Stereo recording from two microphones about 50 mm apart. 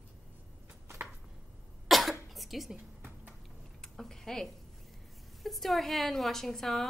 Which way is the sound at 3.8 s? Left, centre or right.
Centre.